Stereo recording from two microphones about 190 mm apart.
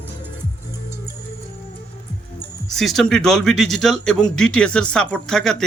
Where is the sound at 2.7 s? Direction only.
Centre (ahead or behind).